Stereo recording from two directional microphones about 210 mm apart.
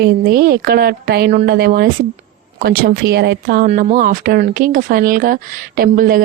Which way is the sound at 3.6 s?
35° right (ahead or behind).